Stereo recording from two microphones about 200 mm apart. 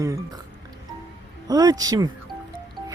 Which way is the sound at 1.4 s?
20° right (ahead or behind).